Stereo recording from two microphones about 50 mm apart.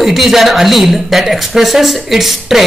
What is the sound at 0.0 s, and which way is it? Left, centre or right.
Speech, centre.